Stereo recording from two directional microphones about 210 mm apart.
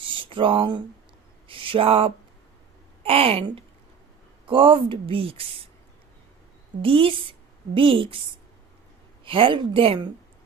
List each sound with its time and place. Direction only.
0.0 s a sound: 25° right (ahead or behind)
3.0 s a woman's voice: 25° right (ahead or behind)
6.8 s a woman's voice: 25° right (ahead or behind)
9.2 s speech: 25° right (ahead or behind)